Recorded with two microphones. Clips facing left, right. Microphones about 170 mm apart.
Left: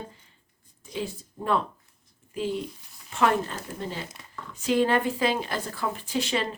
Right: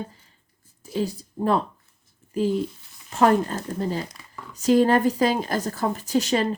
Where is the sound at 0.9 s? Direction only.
40° right (ahead or behind).